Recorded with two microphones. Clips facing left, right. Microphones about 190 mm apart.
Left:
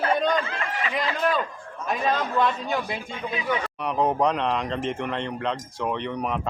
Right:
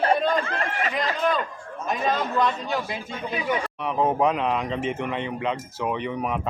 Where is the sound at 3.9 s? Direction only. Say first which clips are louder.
Right 1 dB; 5° right (ahead or behind).